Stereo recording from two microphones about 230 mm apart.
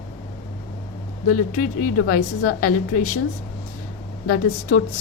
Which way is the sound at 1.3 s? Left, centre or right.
Left.